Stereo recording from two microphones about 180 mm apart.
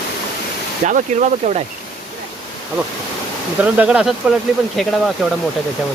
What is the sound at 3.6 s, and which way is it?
Speech, 5° right (ahead or behind).